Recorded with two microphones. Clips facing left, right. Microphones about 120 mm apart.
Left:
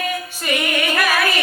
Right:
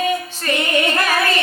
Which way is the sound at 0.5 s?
25° right (ahead or behind).